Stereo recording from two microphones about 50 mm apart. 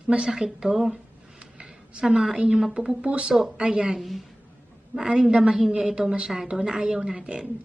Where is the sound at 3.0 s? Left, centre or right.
Right.